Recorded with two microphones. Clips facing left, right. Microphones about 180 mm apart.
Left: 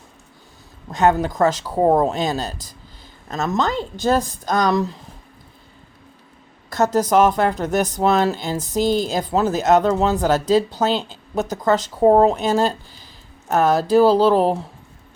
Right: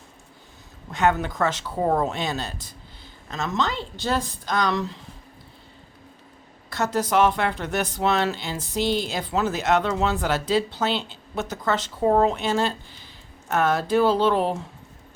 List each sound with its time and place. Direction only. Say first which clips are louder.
0.9 s speech: left 5 dB; 40° left (ahead or behind)
6.7 s speech: left 6 dB; 45° left (ahead or behind)